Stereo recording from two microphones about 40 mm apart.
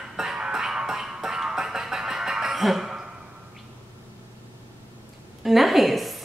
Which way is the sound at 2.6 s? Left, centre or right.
Centre.